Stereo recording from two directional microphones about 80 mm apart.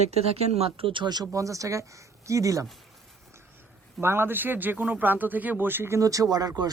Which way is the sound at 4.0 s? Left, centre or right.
Right.